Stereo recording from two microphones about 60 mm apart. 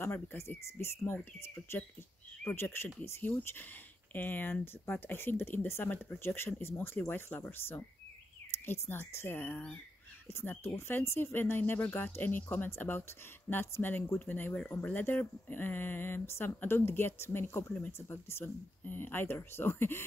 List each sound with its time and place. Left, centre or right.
0.0 s speech: left